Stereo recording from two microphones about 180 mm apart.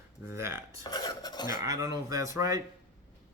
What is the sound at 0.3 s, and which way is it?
Speech, 15° right (ahead or behind).